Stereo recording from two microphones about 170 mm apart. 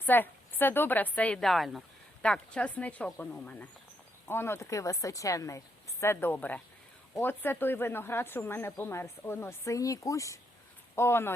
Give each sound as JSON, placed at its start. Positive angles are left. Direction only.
{"t": 0.0, "sound": "speech", "side_deg": 10}